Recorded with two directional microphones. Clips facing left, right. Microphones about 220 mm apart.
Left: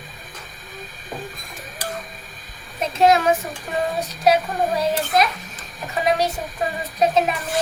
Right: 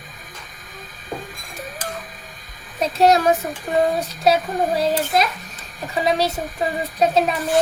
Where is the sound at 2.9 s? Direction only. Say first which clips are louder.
Right 1 dB; 35° right (ahead or behind).